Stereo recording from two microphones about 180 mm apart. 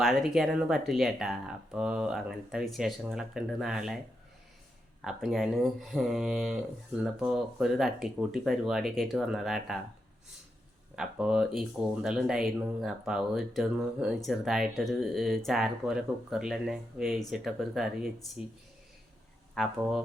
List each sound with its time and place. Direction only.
0.0 s speech: centre (ahead or behind)
5.0 s speech: centre (ahead or behind)
10.9 s speech: 5° right (ahead or behind)
19.5 s speech: centre (ahead or behind)